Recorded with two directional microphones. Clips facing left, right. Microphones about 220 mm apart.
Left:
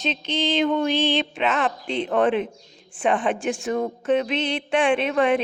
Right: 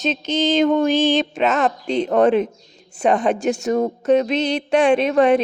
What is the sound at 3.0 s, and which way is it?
A woman's voice, 40° right (ahead or behind).